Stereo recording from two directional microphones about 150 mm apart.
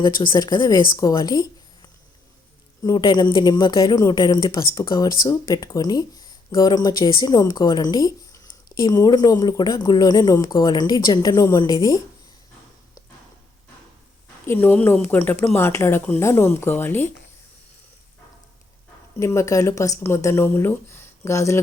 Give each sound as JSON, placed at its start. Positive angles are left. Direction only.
{"t": 0.0, "sound": "speech", "side_deg": 30}
{"t": 14.4, "sound": "speech", "side_deg": 15}
{"t": 19.2, "sound": "speech", "side_deg": 20}